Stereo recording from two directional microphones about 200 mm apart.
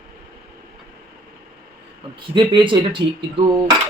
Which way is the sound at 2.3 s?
25° right (ahead or behind).